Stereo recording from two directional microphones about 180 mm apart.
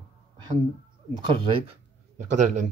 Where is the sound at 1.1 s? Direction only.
25° right (ahead or behind).